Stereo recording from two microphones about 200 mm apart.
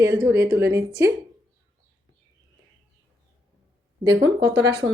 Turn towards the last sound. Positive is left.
turn(degrees=-60)  # may be behind; listen again after turning